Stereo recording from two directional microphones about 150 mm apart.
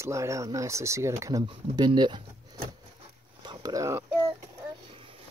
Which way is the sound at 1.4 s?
30° right (ahead or behind).